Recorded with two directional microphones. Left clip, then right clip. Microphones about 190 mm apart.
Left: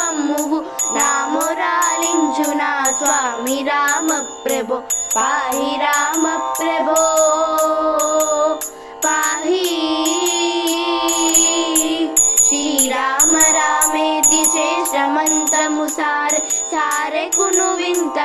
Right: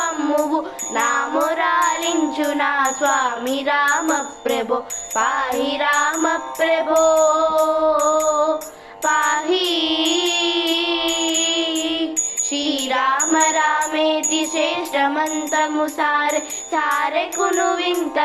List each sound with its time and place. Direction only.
2.2 s music: 30° left (ahead or behind)
3.7 s a sound: 30° left (ahead or behind)
5.9 s music: 10° left (ahead or behind)
6.7 s music: 50° left (ahead or behind)
7.9 s music: 10° left (ahead or behind)
10.0 s music: 50° left (ahead or behind)
13.0 s music: 30° left (ahead or behind)
14.2 s music: 50° left (ahead or behind)
14.5 s music: 20° left (ahead or behind)
16.3 s music: 45° left (ahead or behind)
17.3 s a sound: 30° left (ahead or behind)